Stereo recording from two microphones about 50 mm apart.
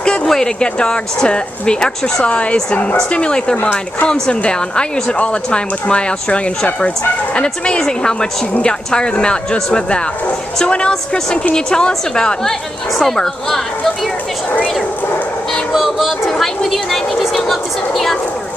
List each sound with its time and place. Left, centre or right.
0.0 s speech: centre
15.7 s music: centre
16.1 s speech: centre